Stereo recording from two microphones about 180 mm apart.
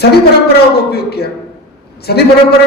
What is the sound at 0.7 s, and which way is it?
A man's voice, 60° left (ahead or behind).